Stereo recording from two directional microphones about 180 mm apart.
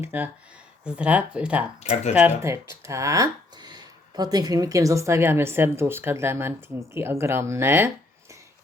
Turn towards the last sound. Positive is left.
turn(degrees=-10)  # may be behind; listen again after turning